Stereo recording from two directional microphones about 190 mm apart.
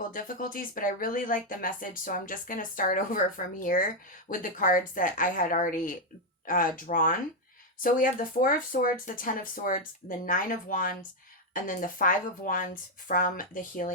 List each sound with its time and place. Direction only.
0.1 s speech: 45° left (ahead or behind)